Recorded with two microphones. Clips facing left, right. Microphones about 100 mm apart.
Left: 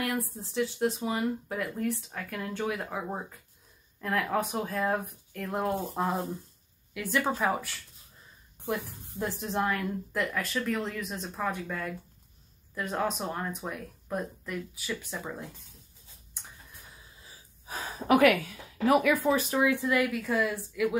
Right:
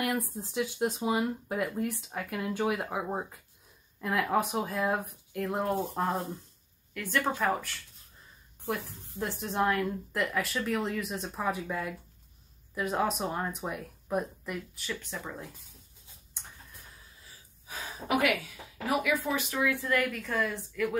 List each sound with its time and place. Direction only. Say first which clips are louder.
0.6 s speech: left 2 dB; 15° right (ahead or behind); by 7.7 s 5° left (ahead or behind)
9.2 s speech: right 1 dB; centre (ahead or behind)
14.8 s speech: left 2 dB; 5° left (ahead or behind)
17.7 s a sound: left 4 dB; 35° left (ahead or behind)
18.0 s speech: left 6 dB; 55° left (ahead or behind)
19.3 s speech: left 5 dB; 40° left (ahead or behind)
19.6 s speech: right 1 dB; 20° left (ahead or behind)